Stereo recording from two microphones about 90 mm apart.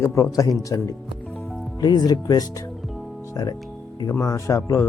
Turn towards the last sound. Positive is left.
turn(degrees=35)  # may be behind; listen again after turning